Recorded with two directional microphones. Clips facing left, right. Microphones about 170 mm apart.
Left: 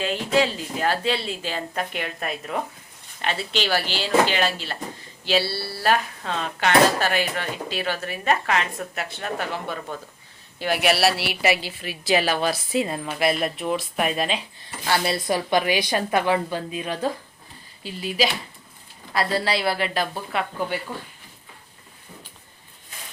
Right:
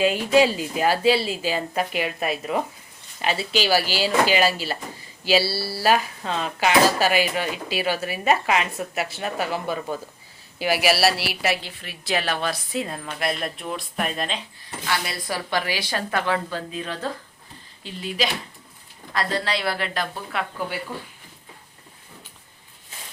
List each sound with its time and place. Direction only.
0.0 s a woman's voice: 10° right (ahead or behind); by 14.4 s 10° left (ahead or behind)
14.8 s a woman's voice: 30° left (ahead or behind); by 20.7 s centre (ahead or behind)